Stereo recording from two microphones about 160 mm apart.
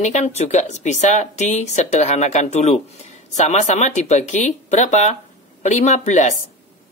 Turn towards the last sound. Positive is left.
turn(degrees=45)  # may be behind; listen again after turning